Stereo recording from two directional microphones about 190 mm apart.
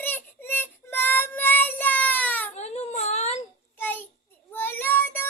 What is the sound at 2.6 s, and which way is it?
Whimper, 35° left (ahead or behind).